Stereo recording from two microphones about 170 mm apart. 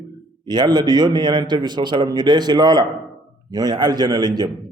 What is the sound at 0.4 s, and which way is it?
A man's voice, 25° right (ahead or behind).